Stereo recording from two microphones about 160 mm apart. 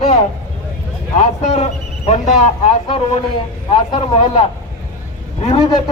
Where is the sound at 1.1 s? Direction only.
45° left (ahead or behind).